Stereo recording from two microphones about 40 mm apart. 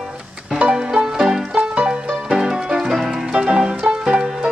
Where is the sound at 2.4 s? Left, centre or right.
Centre.